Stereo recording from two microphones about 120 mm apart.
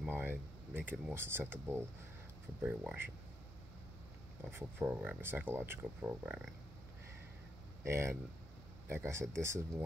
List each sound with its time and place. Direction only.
0.0 s speech: 15° right (ahead or behind)
4.8 s speech: 10° right (ahead or behind)
7.8 s speech: 20° right (ahead or behind)